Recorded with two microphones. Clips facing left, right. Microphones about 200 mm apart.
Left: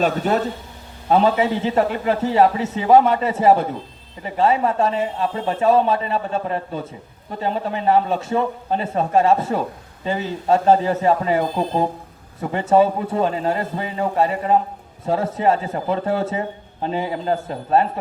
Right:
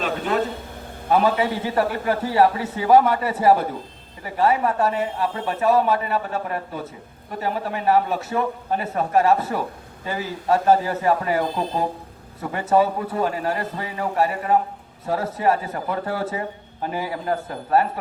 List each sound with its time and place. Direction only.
1.1 s a man's voice: 25° left (ahead or behind)